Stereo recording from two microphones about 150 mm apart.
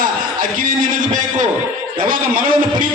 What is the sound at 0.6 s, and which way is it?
Speech, 60° right (ahead or behind).